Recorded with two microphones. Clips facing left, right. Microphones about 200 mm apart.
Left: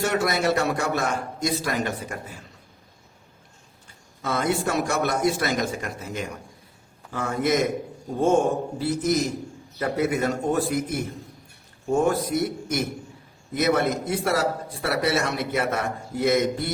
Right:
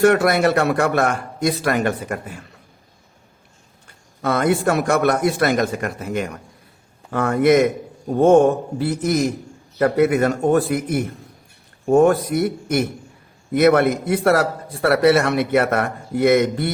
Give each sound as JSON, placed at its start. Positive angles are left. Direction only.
{"t": 0.0, "sound": "speech", "side_deg": -60}
{"t": 4.2, "sound": "speech", "side_deg": -60}